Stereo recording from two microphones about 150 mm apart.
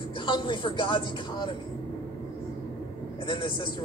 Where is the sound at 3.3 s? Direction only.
35° left (ahead or behind).